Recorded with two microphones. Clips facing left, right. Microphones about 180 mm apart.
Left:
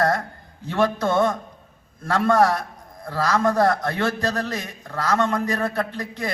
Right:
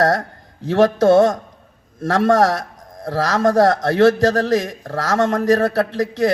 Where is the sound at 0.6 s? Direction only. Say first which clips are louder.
Right 8 dB; 90° right.